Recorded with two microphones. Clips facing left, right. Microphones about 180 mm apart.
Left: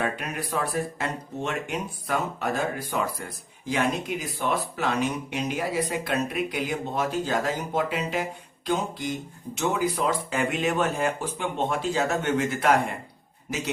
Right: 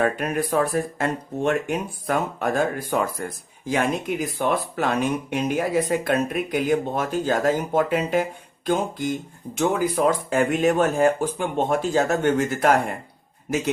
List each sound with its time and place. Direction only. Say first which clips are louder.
0.0 s speech: right 7 dB; 50° right (ahead or behind)
4.4 s speech: right 3 dB; 50° right (ahead or behind)